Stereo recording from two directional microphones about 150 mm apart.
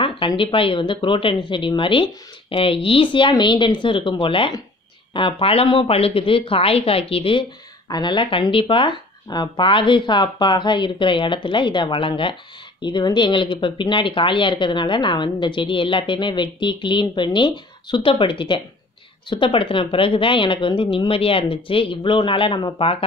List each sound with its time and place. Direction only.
0.0 s speech: 35° left (ahead or behind)